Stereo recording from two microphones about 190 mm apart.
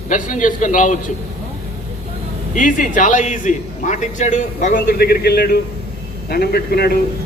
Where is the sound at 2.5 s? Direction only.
45° left (ahead or behind).